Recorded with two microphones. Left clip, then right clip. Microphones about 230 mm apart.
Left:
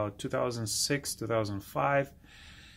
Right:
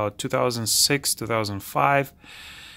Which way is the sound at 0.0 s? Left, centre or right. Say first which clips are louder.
Right 8 dB; right.